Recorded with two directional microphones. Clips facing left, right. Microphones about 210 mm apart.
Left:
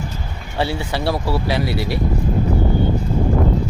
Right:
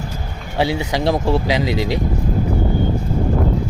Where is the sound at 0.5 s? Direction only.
15° right (ahead or behind).